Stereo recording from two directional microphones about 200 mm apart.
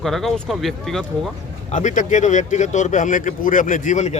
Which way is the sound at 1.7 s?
40° left (ahead or behind).